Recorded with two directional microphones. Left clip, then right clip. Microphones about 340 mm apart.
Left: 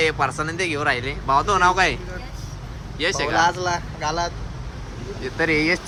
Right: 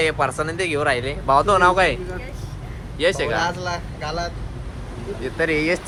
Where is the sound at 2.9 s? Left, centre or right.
Centre.